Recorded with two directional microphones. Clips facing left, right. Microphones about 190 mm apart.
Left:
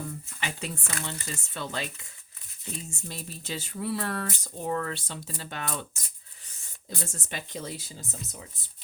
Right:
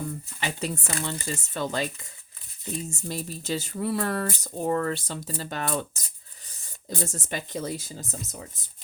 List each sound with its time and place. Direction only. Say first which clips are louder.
0.3 s speech: right 5 dB; 35° right (ahead or behind)
2.9 s speech: right 7 dB; 40° right (ahead or behind)
7.0 s speech: right 6 dB; 40° right (ahead or behind)